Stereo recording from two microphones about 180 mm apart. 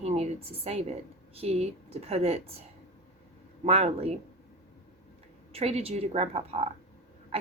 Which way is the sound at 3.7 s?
35° right (ahead or behind).